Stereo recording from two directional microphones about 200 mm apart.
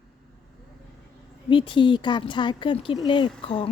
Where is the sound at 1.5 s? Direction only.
25° left (ahead or behind).